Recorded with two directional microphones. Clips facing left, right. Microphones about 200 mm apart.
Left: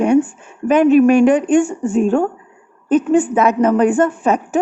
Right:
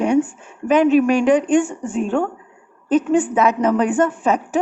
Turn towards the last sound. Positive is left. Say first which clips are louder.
# left 2 dB
turn(degrees=50)  # may be behind; listen again after turning